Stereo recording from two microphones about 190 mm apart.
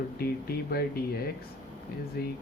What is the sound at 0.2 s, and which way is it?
Speech, 55° left (ahead or behind).